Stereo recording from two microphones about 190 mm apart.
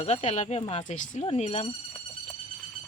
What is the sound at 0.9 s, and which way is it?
Speech, 40° left (ahead or behind).